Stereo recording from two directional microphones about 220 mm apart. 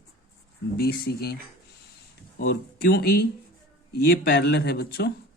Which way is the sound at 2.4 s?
45° left (ahead or behind).